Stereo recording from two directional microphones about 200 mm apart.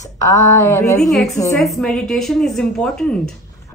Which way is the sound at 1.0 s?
Centre (ahead or behind).